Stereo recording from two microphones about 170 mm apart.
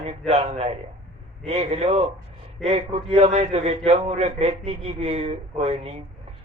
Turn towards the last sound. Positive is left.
turn(degrees=-35)  # may be behind; listen again after turning